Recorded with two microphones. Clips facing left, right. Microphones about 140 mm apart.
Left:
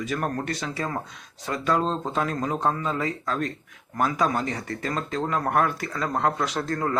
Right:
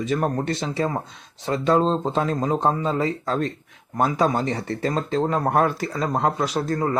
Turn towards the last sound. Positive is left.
turn(degrees=-15)  # may be behind; listen again after turning